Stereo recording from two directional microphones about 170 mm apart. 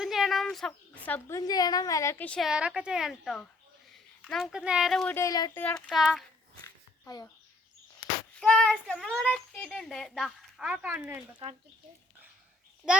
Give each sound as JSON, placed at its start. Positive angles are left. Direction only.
{"t": 0.0, "sound": "a sound", "side_deg": 0}
{"t": 1.0, "sound": "speech", "side_deg": 10}
{"t": 1.4, "sound": "a woman's voice", "side_deg": 20}
{"t": 2.5, "sound": "a child's voice", "side_deg": -5}
{"t": 5.1, "sound": "speech", "side_deg": 20}
{"t": 5.6, "sound": "a child's voice", "side_deg": 5}
{"t": 8.4, "sound": "a child's voice", "side_deg": 5}
{"t": 12.8, "sound": "a child's voice", "side_deg": -5}